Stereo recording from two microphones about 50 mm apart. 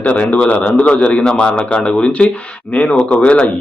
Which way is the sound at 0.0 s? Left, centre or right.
Left.